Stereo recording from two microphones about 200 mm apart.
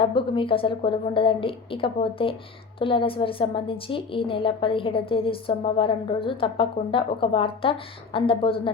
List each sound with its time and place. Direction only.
0.0 s a woman's voice: 25° left (ahead or behind)